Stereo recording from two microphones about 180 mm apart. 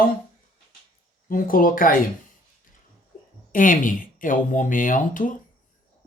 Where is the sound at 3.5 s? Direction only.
45° left (ahead or behind).